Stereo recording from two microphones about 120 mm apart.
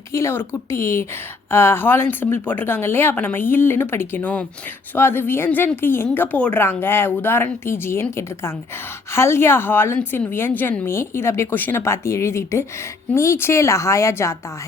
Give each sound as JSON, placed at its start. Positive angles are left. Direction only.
{"t": 0.1, "sound": "a woman's voice", "side_deg": 20}